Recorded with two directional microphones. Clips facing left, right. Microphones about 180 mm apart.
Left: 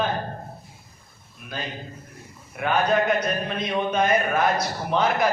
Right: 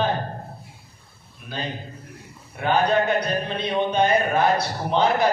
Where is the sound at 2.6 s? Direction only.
30° right (ahead or behind).